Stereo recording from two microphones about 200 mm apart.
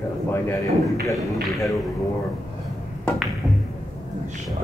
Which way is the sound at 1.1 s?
Centre (ahead or behind).